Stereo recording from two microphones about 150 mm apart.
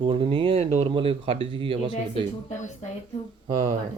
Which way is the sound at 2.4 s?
50° left (ahead or behind).